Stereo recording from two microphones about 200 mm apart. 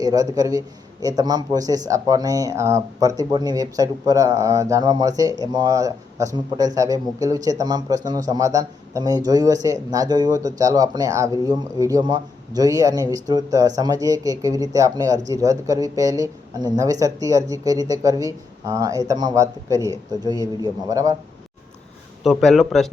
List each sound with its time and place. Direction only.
0.0 s speech: 15° right (ahead or behind)
22.2 s speech: centre (ahead or behind)